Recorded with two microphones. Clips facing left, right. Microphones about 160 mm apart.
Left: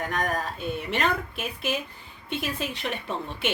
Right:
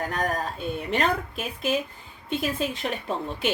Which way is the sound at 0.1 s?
35° right (ahead or behind).